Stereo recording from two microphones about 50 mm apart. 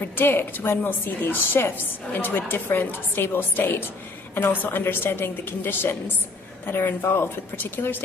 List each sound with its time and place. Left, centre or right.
0.0 s a woman's voice: left